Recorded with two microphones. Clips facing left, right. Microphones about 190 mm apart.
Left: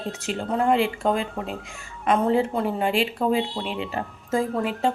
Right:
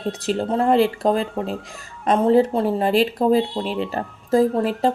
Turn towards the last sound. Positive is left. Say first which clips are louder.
# right 5 dB
turn(degrees=-35)  # may be behind; listen again after turning